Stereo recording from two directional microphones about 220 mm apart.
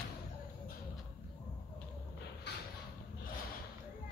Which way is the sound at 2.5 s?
50° left (ahead or behind).